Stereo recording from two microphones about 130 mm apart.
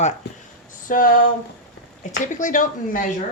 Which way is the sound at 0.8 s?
90° left.